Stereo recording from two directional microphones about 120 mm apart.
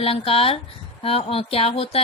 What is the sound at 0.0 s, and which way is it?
Speech, 55° left (ahead or behind).